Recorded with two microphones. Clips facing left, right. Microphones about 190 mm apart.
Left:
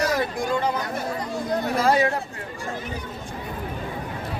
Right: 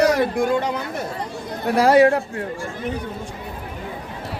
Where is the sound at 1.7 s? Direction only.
70° right (ahead or behind).